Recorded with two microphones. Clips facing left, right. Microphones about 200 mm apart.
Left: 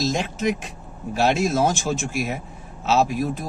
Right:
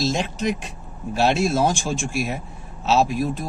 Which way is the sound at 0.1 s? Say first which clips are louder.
Even; centre (ahead or behind).